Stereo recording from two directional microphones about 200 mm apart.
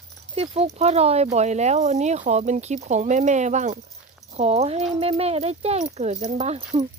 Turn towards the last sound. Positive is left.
turn(degrees=-35)  # may be behind; listen again after turning